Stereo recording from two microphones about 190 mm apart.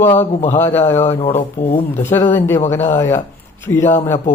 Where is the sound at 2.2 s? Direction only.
40° left (ahead or behind).